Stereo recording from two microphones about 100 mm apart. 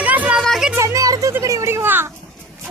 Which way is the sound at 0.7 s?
30° right (ahead or behind).